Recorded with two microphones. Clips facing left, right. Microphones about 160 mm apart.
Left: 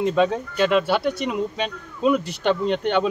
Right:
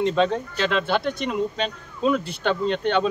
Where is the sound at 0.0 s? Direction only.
10° left (ahead or behind).